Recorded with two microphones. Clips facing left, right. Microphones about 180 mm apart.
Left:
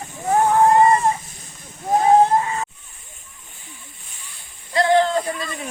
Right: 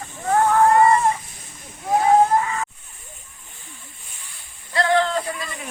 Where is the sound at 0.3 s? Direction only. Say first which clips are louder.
Left 1 dB; 20° left (ahead or behind).